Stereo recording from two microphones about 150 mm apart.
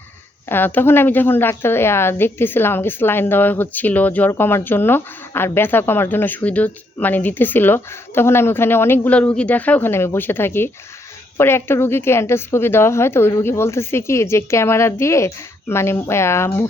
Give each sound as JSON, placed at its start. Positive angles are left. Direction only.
{"t": 0.4, "sound": "a woman's voice", "side_deg": 15}